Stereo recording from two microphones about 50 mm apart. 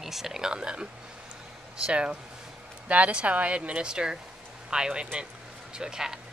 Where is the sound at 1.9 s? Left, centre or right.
Right.